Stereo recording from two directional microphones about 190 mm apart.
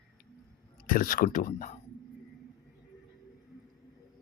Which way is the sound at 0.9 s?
45° left (ahead or behind).